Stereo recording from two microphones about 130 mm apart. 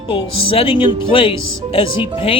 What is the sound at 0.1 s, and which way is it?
Speech, 45° left (ahead or behind).